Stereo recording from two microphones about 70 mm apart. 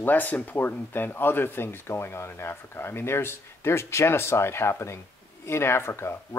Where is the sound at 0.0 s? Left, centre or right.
Left.